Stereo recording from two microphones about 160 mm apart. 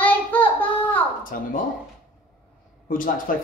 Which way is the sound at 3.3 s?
60° left (ahead or behind).